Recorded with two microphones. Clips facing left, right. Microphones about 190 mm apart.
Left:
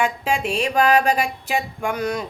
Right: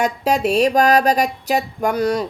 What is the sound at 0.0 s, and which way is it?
Speech, 40° right (ahead or behind).